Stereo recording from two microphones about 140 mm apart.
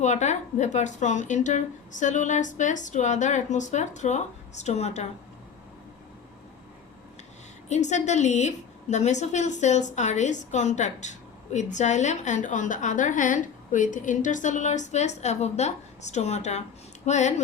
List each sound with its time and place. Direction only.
0.0 s a woman's voice: 55° left (ahead or behind)
7.7 s a woman's voice: 55° left (ahead or behind)